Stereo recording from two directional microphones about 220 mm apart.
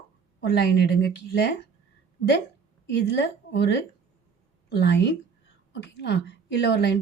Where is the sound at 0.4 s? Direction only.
50° left (ahead or behind).